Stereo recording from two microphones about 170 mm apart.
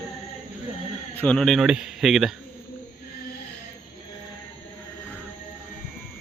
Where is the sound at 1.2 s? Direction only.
5° left (ahead or behind).